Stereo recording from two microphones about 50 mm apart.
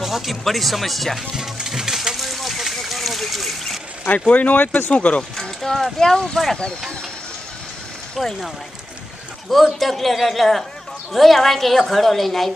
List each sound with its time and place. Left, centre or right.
0.0 s a woman's voice: centre
1.3 s a sound: centre
4.3 s speech: left
5.4 s a sound: centre
5.9 s speech: centre
8.2 s a woman's voice: centre
9.5 s a woman's voice: centre